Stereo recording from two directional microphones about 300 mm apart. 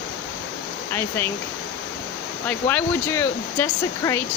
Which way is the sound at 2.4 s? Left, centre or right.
Centre.